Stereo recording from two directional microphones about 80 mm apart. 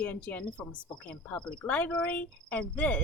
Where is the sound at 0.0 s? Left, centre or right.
Centre.